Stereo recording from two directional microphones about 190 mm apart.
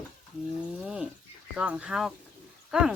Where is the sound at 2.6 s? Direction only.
5° right (ahead or behind).